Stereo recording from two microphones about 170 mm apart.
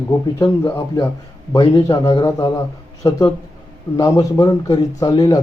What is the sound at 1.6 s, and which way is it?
A man's voice, 30° left (ahead or behind).